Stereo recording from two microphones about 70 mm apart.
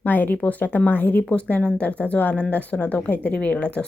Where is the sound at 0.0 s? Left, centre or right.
Left.